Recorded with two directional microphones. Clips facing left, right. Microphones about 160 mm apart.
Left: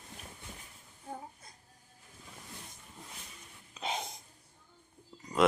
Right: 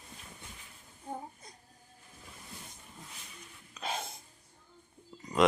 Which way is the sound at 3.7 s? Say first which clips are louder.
Left 1 dB; 20° left (ahead or behind).